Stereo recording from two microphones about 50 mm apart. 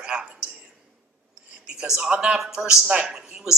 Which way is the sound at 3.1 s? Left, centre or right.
Centre.